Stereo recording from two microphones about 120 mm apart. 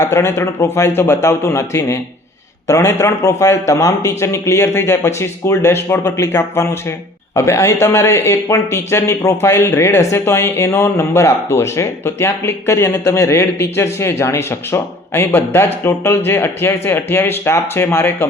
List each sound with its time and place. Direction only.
0.0 s speech: 25° left (ahead or behind)